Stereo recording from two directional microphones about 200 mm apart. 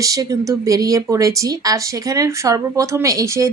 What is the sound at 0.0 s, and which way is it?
Speech, 20° right (ahead or behind).